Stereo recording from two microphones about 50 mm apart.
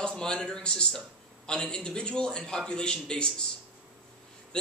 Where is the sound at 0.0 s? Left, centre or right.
Centre.